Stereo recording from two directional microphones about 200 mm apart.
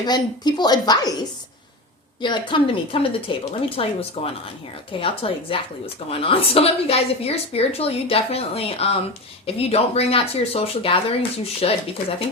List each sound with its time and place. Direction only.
0.0 s a woman's voice: 20° left (ahead or behind)
2.2 s a woman's voice: 25° left (ahead or behind)